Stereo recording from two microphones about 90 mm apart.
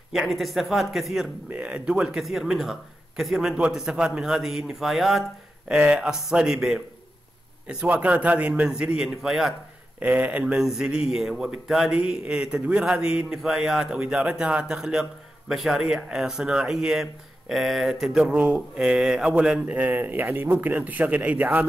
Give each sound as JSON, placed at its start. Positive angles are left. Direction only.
{"t": 0.3, "sound": "a man's voice", "side_deg": 0}
{"t": 9.9, "sound": "a man's voice", "side_deg": -20}